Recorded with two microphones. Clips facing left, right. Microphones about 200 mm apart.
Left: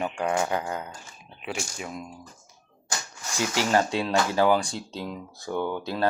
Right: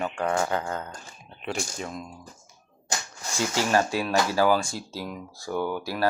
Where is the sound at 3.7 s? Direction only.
20° left (ahead or behind).